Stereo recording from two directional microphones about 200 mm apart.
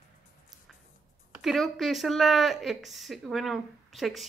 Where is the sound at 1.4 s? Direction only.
Centre (ahead or behind).